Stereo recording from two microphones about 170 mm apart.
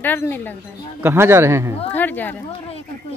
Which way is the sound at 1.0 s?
15° right (ahead or behind).